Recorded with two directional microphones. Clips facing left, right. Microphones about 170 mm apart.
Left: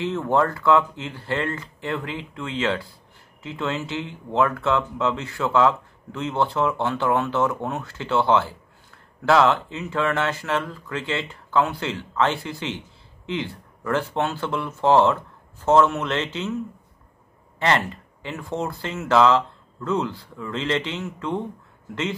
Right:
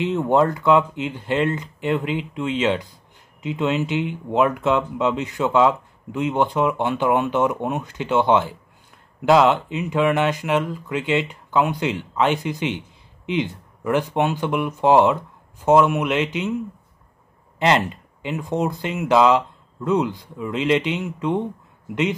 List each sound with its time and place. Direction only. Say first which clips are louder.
0.0 s speech: right 3 dB; 20° right (ahead or behind)
17.6 s speech: right 3 dB; 20° right (ahead or behind)